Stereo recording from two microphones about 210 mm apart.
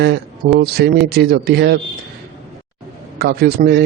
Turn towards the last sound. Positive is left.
turn(degrees=-45)  # may be behind; listen again after turning